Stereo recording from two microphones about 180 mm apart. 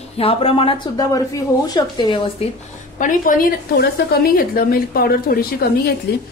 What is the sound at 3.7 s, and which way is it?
A woman's voice, 60° left (ahead or behind).